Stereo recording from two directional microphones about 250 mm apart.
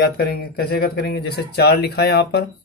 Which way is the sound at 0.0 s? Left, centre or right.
Left.